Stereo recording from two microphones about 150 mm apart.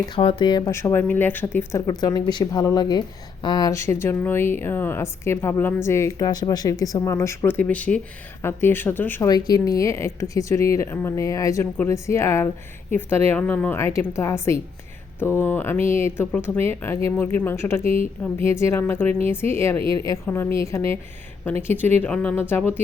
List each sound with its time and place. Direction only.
0.1 s speech: 35° left (ahead or behind)
0.7 s speech: 15° left (ahead or behind)
1.9 s speech: 25° left (ahead or behind)
9.3 s speech: 25° left (ahead or behind)
19.8 s a woman's voice: 35° right (ahead or behind)
20.1 s speech: 15° left (ahead or behind)